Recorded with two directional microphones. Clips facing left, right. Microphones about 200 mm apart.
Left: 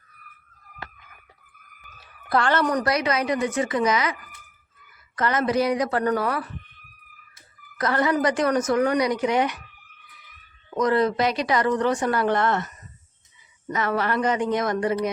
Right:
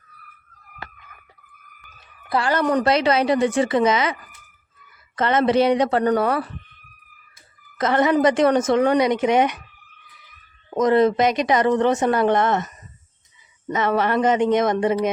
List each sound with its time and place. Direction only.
2.0 s a sound: centre (ahead or behind)
2.6 s speech: 25° right (ahead or behind)
5.1 s speech: 25° right (ahead or behind)
7.8 s speech: 20° right (ahead or behind)
10.8 s speech: 20° right (ahead or behind)